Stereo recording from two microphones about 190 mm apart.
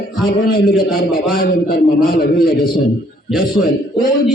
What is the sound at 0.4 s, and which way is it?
A man's voice, 50° left (ahead or behind).